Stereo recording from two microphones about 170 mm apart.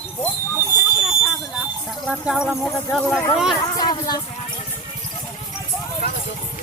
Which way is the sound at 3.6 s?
25° left (ahead or behind).